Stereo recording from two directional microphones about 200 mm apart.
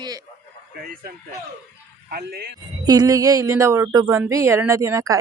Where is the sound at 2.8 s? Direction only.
20° right (ahead or behind).